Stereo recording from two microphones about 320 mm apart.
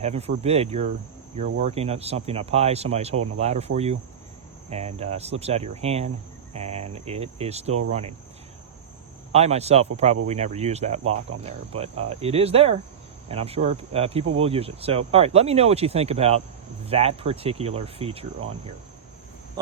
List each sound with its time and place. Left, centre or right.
0.0 s cricket: centre
9.3 s cricket: centre